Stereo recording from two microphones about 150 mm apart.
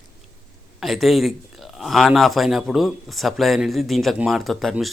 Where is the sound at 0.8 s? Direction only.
Centre (ahead or behind).